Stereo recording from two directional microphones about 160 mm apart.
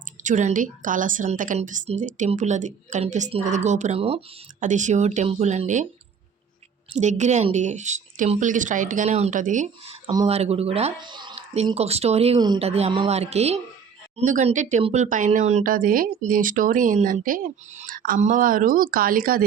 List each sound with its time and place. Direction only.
0.2 s a woman's voice: 50° right (ahead or behind)
4.6 s a woman's voice: 50° right (ahead or behind)
6.9 s a woman's voice: 50° right (ahead or behind); by 11.4 s 30° right (ahead or behind)
11.5 s a woman's voice: 40° right (ahead or behind); by 19.5 s 65° right (ahead or behind)